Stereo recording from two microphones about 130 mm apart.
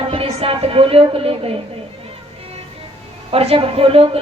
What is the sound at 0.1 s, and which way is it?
A woman's voice, 45° right (ahead or behind).